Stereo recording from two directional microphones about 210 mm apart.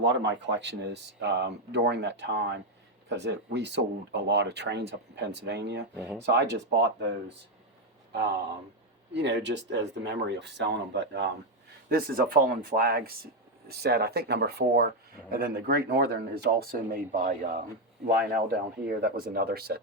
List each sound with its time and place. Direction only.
0.0 s speech: 60° right (ahead or behind)
9.1 s speech: 55° right (ahead or behind)
11.9 s speech: 45° right (ahead or behind)
18.9 s speech: 45° right (ahead or behind)